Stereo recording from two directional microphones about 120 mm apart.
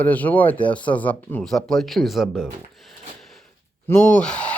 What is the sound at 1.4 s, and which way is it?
Speech, centre (ahead or behind).